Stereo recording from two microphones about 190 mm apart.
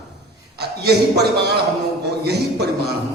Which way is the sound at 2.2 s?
60° right (ahead or behind).